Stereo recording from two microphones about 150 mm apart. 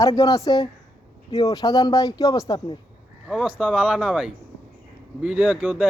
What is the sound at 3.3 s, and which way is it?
Speech, 10° right (ahead or behind).